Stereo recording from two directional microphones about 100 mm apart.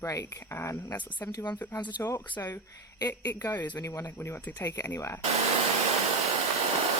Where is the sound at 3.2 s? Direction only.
30° left (ahead or behind).